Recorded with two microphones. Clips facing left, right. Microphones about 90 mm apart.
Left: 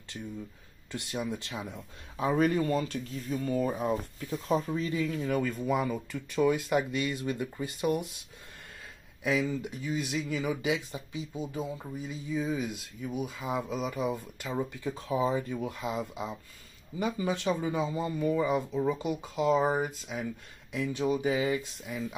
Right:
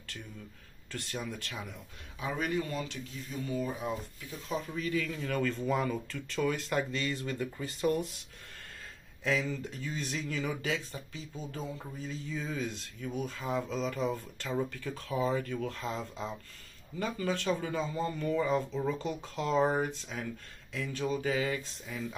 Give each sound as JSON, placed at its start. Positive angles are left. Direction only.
{"t": 0.9, "sound": "speech", "side_deg": 15}
{"t": 2.1, "sound": "speech", "side_deg": 40}
{"t": 5.2, "sound": "speech", "side_deg": 10}
{"t": 6.1, "sound": "speech", "side_deg": 15}
{"t": 9.2, "sound": "speech", "side_deg": 15}
{"t": 20.7, "sound": "speech", "side_deg": 20}